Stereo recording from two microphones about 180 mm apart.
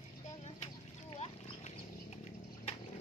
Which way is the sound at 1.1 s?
35° left (ahead or behind).